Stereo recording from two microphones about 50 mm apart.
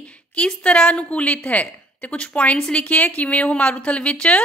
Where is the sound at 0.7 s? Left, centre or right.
Left.